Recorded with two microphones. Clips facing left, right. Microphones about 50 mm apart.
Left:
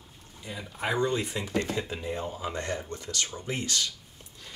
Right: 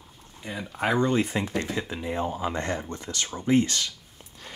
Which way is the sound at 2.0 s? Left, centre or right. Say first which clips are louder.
Right 5 dB; right.